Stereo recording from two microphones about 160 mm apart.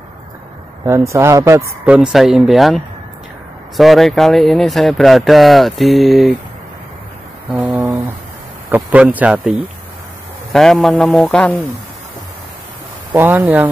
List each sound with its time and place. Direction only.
0.8 s speech: 20° right (ahead or behind)
2.0 s speech: centre (ahead or behind)
7.5 s a sound: 10° right (ahead or behind)
8.7 s speech: 10° right (ahead or behind); by 11.6 s 5° left (ahead or behind)
13.1 s speech: 10° right (ahead or behind)